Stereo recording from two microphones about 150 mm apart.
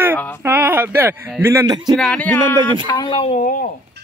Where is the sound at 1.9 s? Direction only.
5° left (ahead or behind).